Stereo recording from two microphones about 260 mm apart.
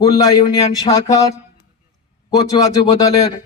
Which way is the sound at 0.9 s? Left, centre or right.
Centre.